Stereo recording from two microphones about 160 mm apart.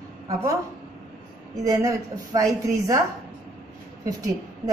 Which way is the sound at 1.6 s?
20° right (ahead or behind).